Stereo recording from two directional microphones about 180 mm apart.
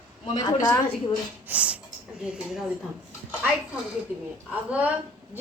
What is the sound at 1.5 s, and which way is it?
A child's voice, 5° right (ahead or behind).